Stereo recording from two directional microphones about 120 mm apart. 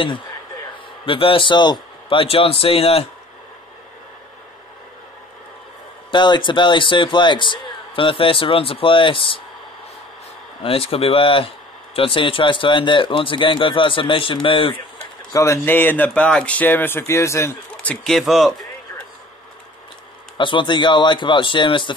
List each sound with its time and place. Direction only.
1.0 s speech: 50° left (ahead or behind)
6.1 s speech: 40° left (ahead or behind)
10.6 s speech: 50° left (ahead or behind)
15.3 s speech: 25° left (ahead or behind)
17.8 s speech: 5° left (ahead or behind)
20.3 s a man's voice: 45° left (ahead or behind)